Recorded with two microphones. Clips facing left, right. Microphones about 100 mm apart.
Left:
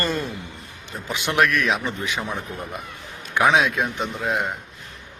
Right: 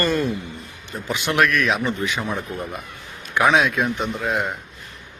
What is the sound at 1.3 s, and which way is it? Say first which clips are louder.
Speech: right 1 dB; 20° left (ahead or behind).